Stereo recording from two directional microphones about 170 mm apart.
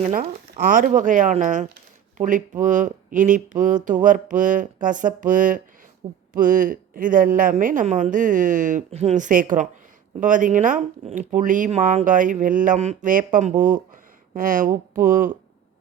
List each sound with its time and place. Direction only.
0.0 s speech: 50° right (ahead or behind)